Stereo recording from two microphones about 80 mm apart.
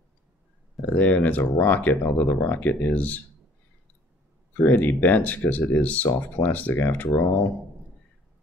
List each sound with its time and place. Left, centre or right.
0.9 s speech: left
4.6 s speech: left